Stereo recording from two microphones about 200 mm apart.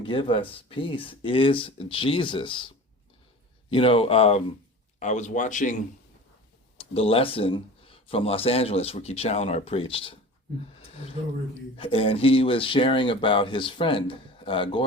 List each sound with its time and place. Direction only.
0.0 s speech: 25° left (ahead or behind)
6.7 s speech: 30° left (ahead or behind)
11.8 s speech: 25° left (ahead or behind)